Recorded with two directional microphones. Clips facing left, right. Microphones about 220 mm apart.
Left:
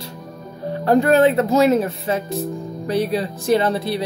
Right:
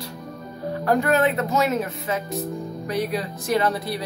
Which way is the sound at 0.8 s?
30° left (ahead or behind).